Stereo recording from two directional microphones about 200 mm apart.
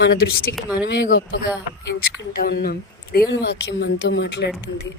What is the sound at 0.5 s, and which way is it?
Speech, 5° right (ahead or behind).